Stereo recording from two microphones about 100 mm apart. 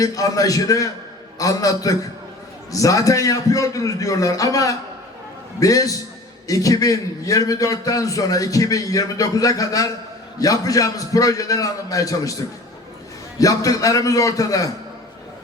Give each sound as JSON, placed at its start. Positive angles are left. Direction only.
{"t": 0.0, "sound": "a man's voice", "side_deg": 35}
{"t": 13.4, "sound": "a man's voice", "side_deg": 35}